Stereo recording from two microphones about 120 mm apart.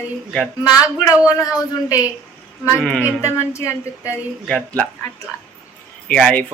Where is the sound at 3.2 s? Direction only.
25° left (ahead or behind).